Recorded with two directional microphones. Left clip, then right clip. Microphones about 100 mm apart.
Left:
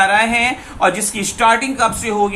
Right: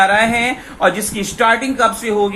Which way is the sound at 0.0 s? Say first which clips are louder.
Even; 35° right (ahead or behind).